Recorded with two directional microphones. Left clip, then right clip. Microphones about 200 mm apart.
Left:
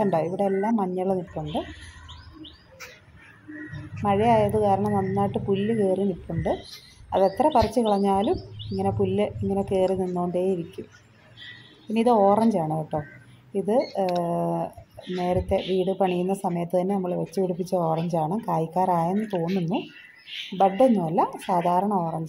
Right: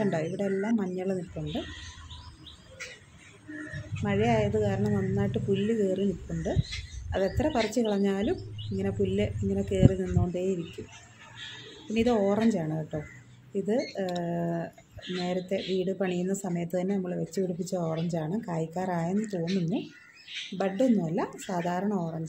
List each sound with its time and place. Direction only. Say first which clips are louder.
0.0 s speech: left 7 dB; centre (ahead or behind)
3.7 s speech: left 7 dB; centre (ahead or behind)